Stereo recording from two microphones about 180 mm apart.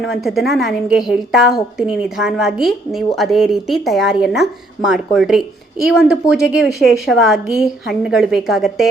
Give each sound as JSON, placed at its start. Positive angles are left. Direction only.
{"t": 0.0, "sound": "a woman's voice", "side_deg": 0}